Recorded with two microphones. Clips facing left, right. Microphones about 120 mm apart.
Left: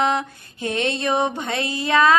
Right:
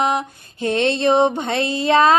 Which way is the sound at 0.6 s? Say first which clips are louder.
Right 5 dB; 35° right (ahead or behind).